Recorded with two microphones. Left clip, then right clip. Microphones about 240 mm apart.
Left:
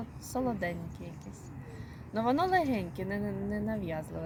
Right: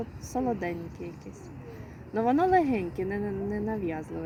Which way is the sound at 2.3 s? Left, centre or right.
Left.